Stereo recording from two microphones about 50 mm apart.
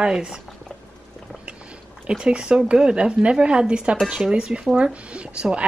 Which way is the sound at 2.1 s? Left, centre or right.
Centre.